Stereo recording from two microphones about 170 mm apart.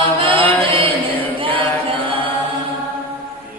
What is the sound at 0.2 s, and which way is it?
Chant, 30° right (ahead or behind).